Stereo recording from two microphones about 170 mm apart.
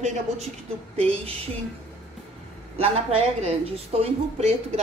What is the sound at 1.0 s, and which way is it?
Speech, 35° right (ahead or behind).